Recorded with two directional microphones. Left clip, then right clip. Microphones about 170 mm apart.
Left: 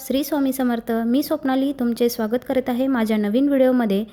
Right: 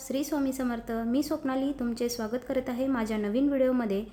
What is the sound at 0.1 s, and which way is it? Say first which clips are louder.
A woman's voice: left 8 dB; 40° left (ahead or behind).